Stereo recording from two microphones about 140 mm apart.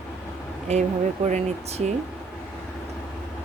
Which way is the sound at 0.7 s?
50° right (ahead or behind).